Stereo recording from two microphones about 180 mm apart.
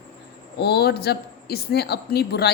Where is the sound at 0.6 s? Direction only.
65° left (ahead or behind).